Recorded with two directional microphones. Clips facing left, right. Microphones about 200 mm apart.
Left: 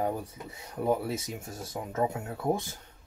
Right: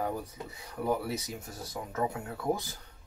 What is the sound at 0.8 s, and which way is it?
Speech, 25° left (ahead or behind).